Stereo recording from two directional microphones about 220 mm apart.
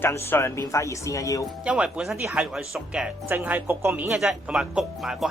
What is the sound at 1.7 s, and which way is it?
Speech, 5° right (ahead or behind).